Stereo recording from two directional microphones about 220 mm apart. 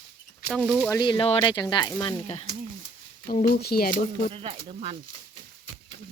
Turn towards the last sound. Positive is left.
turn(degrees=-25)  # may be behind; listen again after turning